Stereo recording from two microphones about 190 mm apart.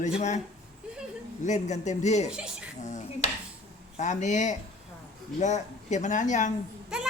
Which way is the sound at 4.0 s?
40° left (ahead or behind).